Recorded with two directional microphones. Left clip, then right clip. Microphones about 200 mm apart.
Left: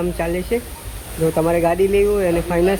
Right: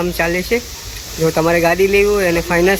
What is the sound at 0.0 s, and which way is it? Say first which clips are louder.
Speech: right 5 dB; 5° right (ahead or behind).